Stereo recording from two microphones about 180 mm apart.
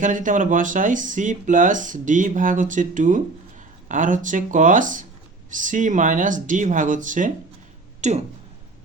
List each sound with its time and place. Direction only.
0.0 s speech: 45° right (ahead or behind)